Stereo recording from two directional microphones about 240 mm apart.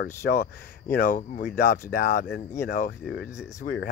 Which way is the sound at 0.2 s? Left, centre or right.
Left.